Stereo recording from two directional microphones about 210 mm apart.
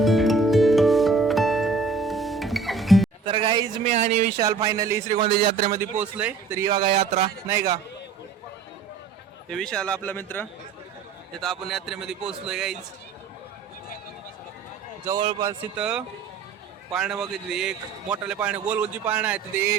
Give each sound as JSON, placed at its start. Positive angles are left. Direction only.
{"t": 0.0, "sound": "music", "side_deg": 0}
{"t": 3.2, "sound": "a sound", "side_deg": -25}
{"t": 3.8, "sound": "speech", "side_deg": -35}
{"t": 4.4, "sound": "a man's voice", "side_deg": -15}
{"t": 7.4, "sound": "a man's voice", "side_deg": -15}
{"t": 9.5, "sound": "a man's voice", "side_deg": 5}
{"t": 15.0, "sound": "a man's voice", "side_deg": -20}